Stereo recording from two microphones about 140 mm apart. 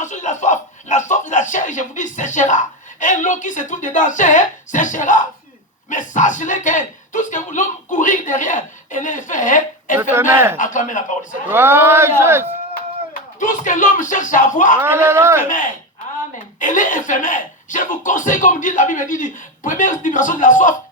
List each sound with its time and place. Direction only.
0.0 s a sound: 60° left (ahead or behind)
5.9 s speech: 65° left (ahead or behind)
10.0 s speech: 15° right (ahead or behind)
10.6 s a man's voice: 65° left (ahead or behind)
11.4 s speech: 15° right (ahead or behind)
12.7 s speech: 80° left
14.8 s speech: 15° right (ahead or behind)
15.4 s speech: 70° left (ahead or behind)